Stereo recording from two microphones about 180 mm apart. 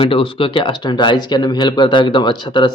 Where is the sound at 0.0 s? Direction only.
30° left (ahead or behind).